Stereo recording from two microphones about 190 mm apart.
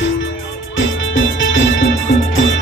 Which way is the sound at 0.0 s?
85° left.